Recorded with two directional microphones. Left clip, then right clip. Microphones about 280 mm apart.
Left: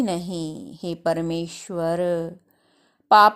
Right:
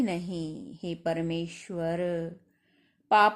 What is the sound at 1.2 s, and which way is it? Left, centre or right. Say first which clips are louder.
Speech: left 6 dB; centre.